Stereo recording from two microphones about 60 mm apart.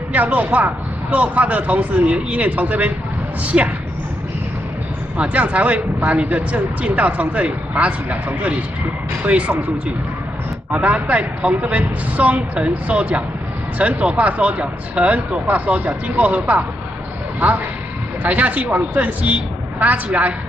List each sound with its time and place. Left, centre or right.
0.1 s speech: right
5.1 s speech: right
10.7 s speech: right
18.2 s speech: right